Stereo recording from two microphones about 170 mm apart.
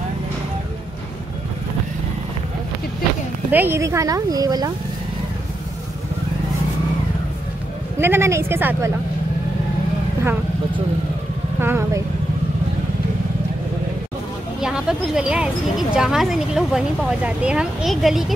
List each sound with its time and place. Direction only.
3.5 s speech: 15° right (ahead or behind)
8.0 s a woman's voice: 15° right (ahead or behind)
11.6 s speech: 15° right (ahead or behind)
14.6 s speech: 5° right (ahead or behind)